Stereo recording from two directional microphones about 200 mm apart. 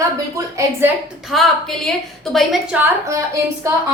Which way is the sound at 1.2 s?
Centre (ahead or behind).